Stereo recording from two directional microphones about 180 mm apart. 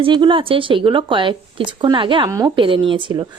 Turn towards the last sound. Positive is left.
turn(degrees=-25)  # may be behind; listen again after turning